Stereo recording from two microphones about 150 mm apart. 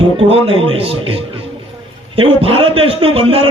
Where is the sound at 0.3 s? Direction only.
40° right (ahead or behind).